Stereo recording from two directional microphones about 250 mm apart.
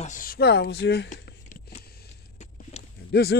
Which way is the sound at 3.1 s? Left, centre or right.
Left.